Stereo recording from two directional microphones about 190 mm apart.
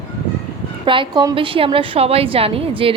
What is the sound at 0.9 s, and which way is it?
Speech, 25° right (ahead or behind).